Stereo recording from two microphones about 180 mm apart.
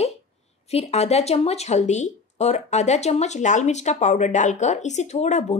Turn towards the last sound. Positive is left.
turn(degrees=40)  # may be behind; listen again after turning